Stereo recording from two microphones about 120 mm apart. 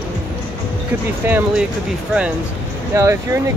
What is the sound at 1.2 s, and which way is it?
Speech, 15° right (ahead or behind).